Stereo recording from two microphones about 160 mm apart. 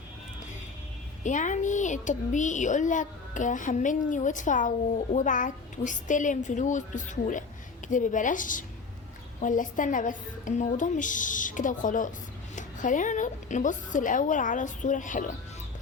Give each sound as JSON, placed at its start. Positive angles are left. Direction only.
{"t": 1.2, "sound": "a woman's voice", "side_deg": 50}